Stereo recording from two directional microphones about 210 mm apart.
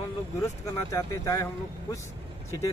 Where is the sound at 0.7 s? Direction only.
15° left (ahead or behind).